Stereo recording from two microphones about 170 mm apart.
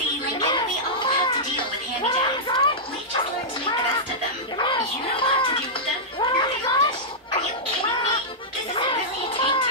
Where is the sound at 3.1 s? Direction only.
30° left (ahead or behind).